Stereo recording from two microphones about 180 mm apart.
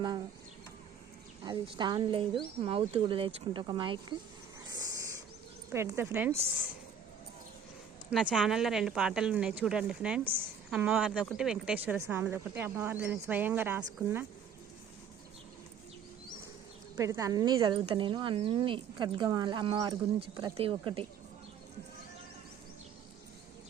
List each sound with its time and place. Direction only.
1.5 s a woman's voice: 25° right (ahead or behind)
4.8 s a sound: 15° right (ahead or behind)
5.7 s a woman's voice: 15° right (ahead or behind)
8.1 s a woman's voice: 5° right (ahead or behind)
17.0 s a woman's voice: 20° right (ahead or behind)